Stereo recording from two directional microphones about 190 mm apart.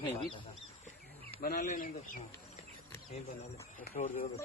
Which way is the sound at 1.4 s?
45° left (ahead or behind).